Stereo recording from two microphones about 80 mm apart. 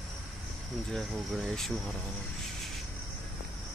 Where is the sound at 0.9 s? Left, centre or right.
Centre.